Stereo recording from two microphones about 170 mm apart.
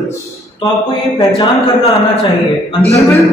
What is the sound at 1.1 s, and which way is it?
Speech, 30° left (ahead or behind).